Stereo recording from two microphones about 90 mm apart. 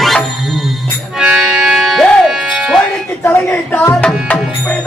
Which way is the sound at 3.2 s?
20° left (ahead or behind).